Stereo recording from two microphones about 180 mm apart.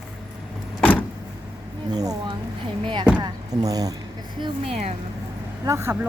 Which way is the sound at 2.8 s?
30° right (ahead or behind).